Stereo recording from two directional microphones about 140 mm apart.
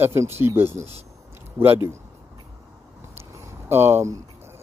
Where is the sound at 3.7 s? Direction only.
15° right (ahead or behind).